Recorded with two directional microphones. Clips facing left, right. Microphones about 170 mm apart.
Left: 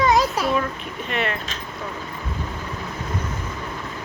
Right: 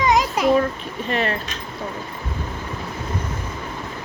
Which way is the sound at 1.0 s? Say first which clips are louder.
Right 3 dB; 35° right (ahead or behind).